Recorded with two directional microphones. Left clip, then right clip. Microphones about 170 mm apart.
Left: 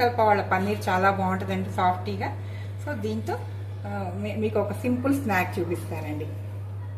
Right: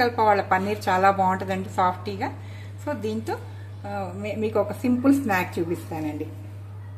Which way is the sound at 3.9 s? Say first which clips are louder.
Right 3 dB; 60° right (ahead or behind).